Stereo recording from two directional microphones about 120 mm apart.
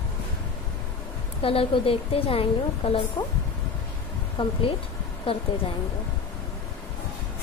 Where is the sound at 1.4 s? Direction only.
50° left (ahead or behind).